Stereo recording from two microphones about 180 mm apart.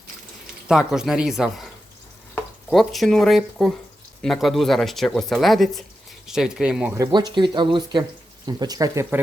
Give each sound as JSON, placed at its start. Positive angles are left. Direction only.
{"t": 0.7, "sound": "speech", "side_deg": -5}
{"t": 7.1, "sound": "speech", "side_deg": -25}